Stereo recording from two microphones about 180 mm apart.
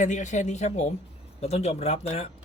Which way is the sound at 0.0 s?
45° left (ahead or behind).